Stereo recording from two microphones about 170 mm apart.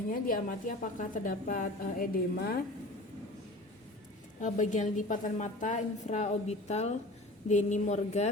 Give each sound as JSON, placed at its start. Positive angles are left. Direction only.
{"t": 0.1, "sound": "a woman's voice", "side_deg": 50}
{"t": 4.4, "sound": "a woman's voice", "side_deg": 45}